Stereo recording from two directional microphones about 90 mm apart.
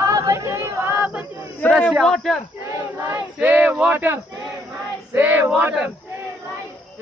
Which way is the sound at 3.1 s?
20° right (ahead or behind).